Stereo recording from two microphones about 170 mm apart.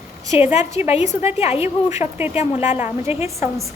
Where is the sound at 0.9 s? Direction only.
40° left (ahead or behind).